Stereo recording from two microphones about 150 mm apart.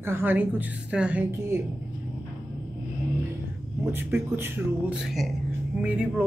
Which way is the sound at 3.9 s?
15° right (ahead or behind).